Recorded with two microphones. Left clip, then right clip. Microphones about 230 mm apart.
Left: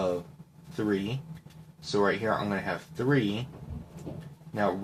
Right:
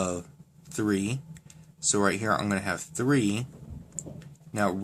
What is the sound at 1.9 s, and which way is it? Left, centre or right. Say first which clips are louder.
Speech: right 1 dB; right.